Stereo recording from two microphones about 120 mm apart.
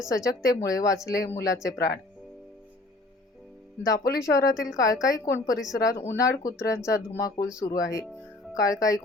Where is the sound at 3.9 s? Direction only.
25° left (ahead or behind).